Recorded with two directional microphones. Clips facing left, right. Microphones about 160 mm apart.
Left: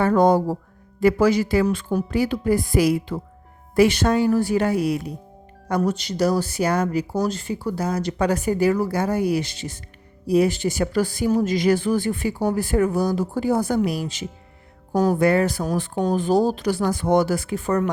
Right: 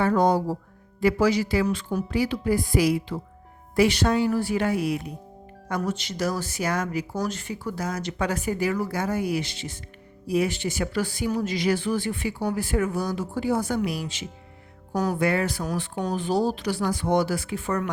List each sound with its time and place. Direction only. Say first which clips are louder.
0.0 s speech: left 4 dB; 50° left (ahead or behind)